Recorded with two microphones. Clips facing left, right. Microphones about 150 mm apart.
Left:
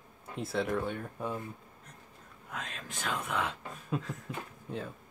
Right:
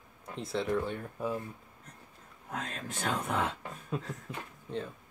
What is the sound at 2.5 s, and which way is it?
Speech, 40° right (ahead or behind).